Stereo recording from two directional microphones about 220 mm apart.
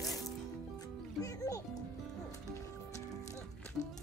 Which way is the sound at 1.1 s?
15° left (ahead or behind).